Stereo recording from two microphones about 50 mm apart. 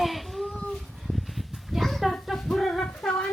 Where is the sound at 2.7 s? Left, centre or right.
Centre.